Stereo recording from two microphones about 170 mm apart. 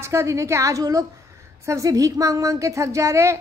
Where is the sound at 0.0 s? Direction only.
15° right (ahead or behind).